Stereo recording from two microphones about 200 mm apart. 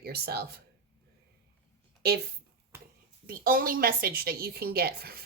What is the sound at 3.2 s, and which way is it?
Speech, 45° right (ahead or behind).